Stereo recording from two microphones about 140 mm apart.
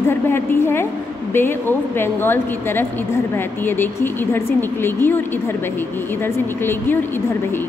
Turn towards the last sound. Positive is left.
turn(degrees=15)  # may be behind; listen again after turning